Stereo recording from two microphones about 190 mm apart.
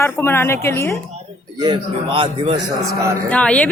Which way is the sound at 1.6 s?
25° right (ahead or behind).